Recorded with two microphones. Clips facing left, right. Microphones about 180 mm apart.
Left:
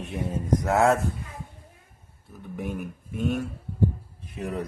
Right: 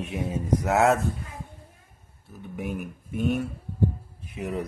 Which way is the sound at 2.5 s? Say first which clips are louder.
Even; centre (ahead or behind).